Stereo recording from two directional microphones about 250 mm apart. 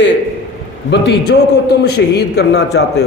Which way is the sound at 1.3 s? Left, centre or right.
Left.